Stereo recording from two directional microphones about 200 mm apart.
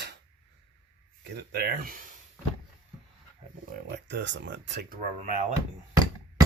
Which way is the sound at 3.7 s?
60° right (ahead or behind).